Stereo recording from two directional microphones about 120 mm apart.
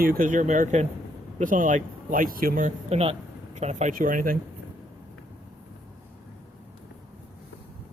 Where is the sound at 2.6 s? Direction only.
60° right (ahead or behind); by 3.9 s 85° right.